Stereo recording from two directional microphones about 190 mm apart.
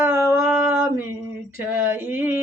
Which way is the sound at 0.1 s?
15° right (ahead or behind).